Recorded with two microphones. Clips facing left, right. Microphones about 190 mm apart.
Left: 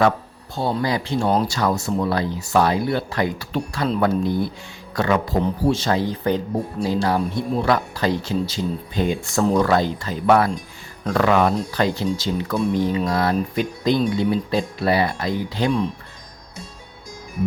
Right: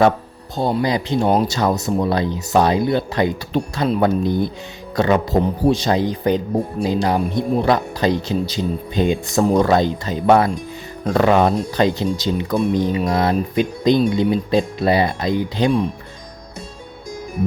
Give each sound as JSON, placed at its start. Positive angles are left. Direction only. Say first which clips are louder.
{"t": 0.5, "sound": "speech", "louder": "right 3 dB", "side_deg": -15}